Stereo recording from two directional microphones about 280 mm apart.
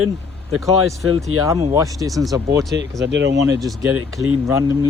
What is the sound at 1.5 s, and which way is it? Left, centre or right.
Speech, centre.